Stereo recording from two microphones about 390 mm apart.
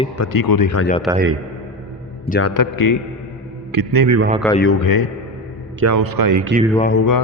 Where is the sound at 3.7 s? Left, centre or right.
Right.